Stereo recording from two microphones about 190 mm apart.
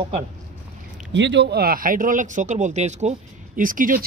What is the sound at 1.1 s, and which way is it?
Speech, 65° right (ahead or behind).